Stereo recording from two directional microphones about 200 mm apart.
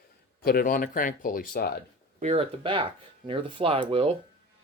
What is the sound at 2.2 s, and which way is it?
Speech, 30° right (ahead or behind).